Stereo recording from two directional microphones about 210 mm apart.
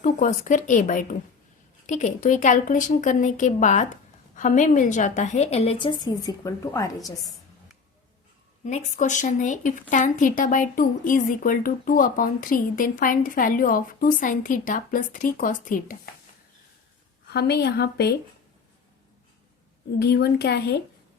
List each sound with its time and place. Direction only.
0.0 s a woman's voice: 35° left (ahead or behind); by 6.9 s 15° left (ahead or behind)
8.6 s speech: 35° left (ahead or behind)
17.3 s speech: 50° left (ahead or behind)
20.0 s speech: 50° left (ahead or behind)